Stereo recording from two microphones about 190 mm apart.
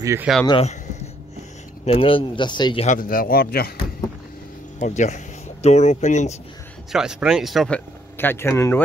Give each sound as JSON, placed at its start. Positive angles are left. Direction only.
{"t": 0.0, "sound": "speech", "side_deg": -15}
{"t": 0.5, "sound": "speech", "side_deg": 30}
{"t": 1.9, "sound": "speech", "side_deg": 30}
{"t": 2.9, "sound": "speech", "side_deg": 45}
{"t": 4.7, "sound": "speech", "side_deg": 40}
{"t": 6.9, "sound": "speech", "side_deg": -5}